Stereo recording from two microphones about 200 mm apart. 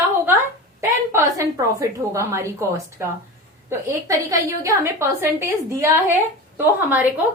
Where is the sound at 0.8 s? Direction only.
15° right (ahead or behind).